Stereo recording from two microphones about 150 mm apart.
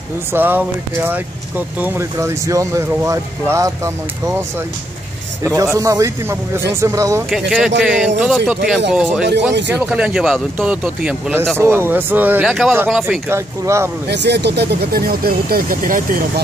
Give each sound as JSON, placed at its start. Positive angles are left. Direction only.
{"t": 0.3, "sound": "speech", "side_deg": -10}
{"t": 5.6, "sound": "speech", "side_deg": -20}
{"t": 7.2, "sound": "speech", "side_deg": -5}
{"t": 14.0, "sound": "speech", "side_deg": -90}